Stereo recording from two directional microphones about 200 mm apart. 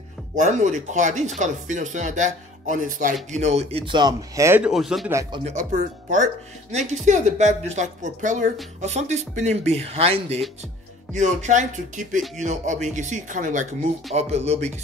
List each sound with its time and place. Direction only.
0.4 s speech: 35° right (ahead or behind); by 4.6 s 15° right (ahead or behind)
4.6 s speech: centre (ahead or behind)
5.4 s speech: 35° right (ahead or behind)